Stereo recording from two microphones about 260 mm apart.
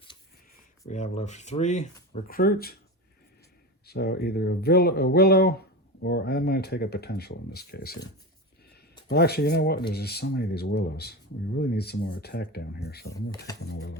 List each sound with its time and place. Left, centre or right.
0.9 s speech: left
3.8 s speech: left
9.0 s speech: left